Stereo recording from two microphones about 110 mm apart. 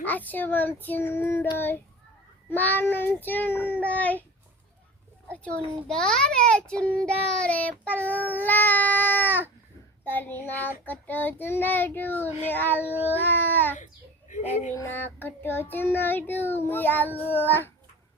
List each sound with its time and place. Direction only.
0.0 s a child's voice: 15° left (ahead or behind)
1.5 s child singing: 20° left (ahead or behind)
2.5 s a child's voice: 15° left (ahead or behind)
5.3 s a child's voice: 10° left (ahead or behind)
12.8 s a sound: 15° right (ahead or behind)
13.1 s a child's voice: 20° left (ahead or behind)
14.8 s child singing: 20° left (ahead or behind)
17.1 s a sound: 15° right (ahead or behind)
17.4 s a child's voice: 20° left (ahead or behind)